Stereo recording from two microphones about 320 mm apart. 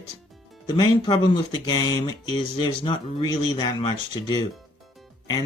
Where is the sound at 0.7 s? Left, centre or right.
Centre.